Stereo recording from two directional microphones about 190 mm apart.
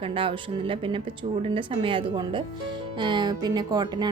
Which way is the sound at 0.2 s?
25° right (ahead or behind).